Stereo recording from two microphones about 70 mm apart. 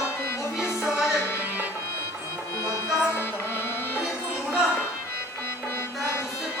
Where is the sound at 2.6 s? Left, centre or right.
Left.